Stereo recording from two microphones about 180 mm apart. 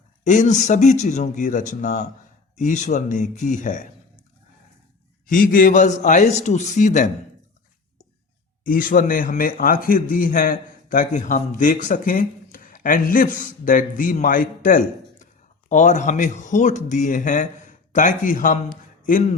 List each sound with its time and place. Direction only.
0.3 s a man's voice: 40° left (ahead or behind)
5.2 s a man's voice: 50° left (ahead or behind)
8.6 s a man's voice: 50° left (ahead or behind)